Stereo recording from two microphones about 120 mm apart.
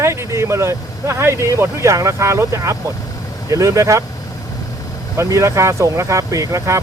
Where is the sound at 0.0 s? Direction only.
25° right (ahead or behind).